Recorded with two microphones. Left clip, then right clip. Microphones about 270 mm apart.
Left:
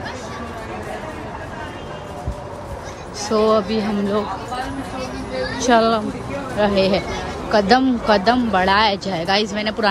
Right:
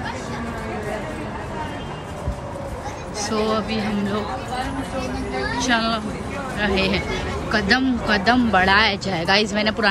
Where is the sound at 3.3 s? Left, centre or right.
Centre.